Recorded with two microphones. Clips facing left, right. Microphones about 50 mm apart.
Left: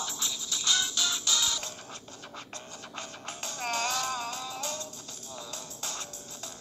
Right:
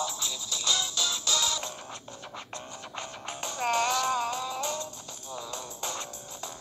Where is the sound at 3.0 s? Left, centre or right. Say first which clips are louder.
Right 3 dB; right.